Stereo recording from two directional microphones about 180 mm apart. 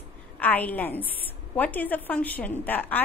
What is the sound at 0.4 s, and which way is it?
A woman's voice, 10° left (ahead or behind).